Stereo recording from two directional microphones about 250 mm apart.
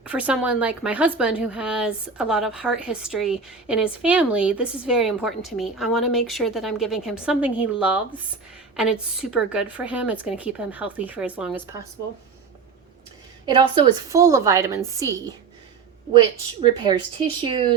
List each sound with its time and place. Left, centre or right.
0.0 s a woman's voice: centre
13.4 s a woman's voice: centre
16.6 s a woman's voice: centre